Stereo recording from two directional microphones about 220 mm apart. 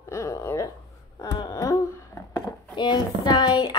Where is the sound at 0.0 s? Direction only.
15° left (ahead or behind).